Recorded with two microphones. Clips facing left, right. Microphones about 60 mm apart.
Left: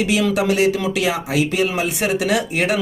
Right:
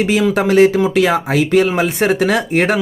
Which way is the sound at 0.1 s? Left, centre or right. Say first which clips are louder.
Right 4 dB; right.